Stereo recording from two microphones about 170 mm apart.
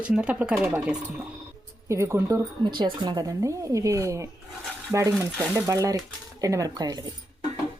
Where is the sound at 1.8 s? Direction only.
15° right (ahead or behind).